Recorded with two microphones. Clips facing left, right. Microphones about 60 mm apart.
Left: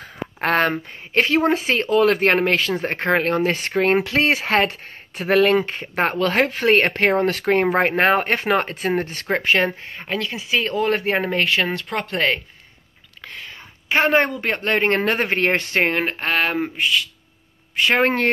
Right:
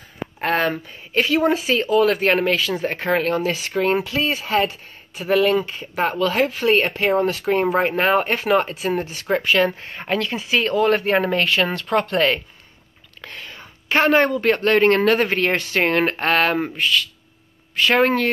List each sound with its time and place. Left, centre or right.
0.0 s speech: left
4.0 s speech: left
7.7 s speech: left
10.1 s speech: centre
10.8 s speech: left
16.0 s speech: centre; by 18.0 s left
18.0 s speech: left